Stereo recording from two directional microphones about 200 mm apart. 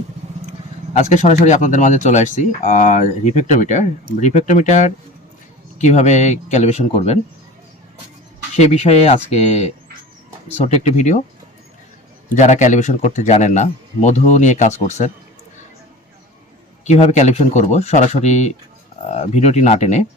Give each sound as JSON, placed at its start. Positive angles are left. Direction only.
{"t": 0.9, "sound": "speech", "side_deg": 35}
{"t": 8.5, "sound": "speech", "side_deg": 35}
{"t": 12.3, "sound": "speech", "side_deg": 35}
{"t": 16.8, "sound": "speech", "side_deg": 35}